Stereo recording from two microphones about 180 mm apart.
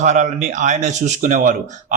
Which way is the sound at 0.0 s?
40° right (ahead or behind).